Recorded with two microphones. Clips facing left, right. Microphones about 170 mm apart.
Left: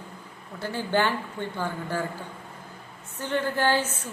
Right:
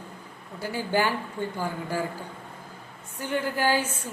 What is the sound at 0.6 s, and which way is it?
A woman's voice, 10° right (ahead or behind).